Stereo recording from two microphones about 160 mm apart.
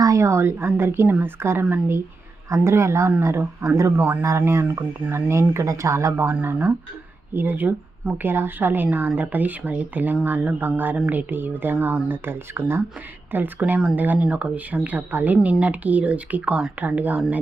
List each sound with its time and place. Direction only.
0.0 s speech: 20° right (ahead or behind)